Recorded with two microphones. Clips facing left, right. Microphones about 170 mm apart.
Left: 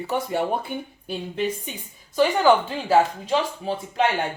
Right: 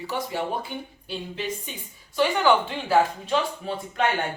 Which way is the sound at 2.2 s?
40° left (ahead or behind).